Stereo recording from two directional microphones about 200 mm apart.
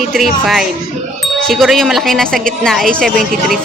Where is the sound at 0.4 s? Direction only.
Centre (ahead or behind).